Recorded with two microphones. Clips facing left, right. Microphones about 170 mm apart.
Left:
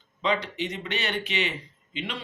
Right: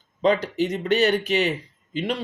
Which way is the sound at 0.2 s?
40° right (ahead or behind).